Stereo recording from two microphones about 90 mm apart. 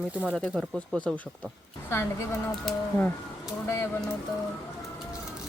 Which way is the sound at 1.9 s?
30° left (ahead or behind).